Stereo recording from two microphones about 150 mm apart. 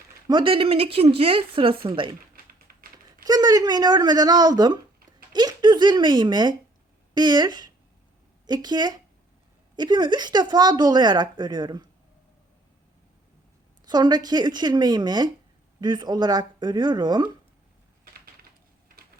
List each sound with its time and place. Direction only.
0.3 s speech: 35° right (ahead or behind)
3.2 s speech: 25° right (ahead or behind)
13.8 s speech: 30° right (ahead or behind)